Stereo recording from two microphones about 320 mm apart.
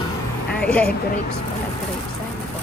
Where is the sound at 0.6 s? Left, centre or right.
Centre.